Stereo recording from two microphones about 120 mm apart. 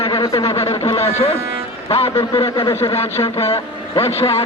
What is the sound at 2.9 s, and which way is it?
A man's voice, 60° left (ahead or behind).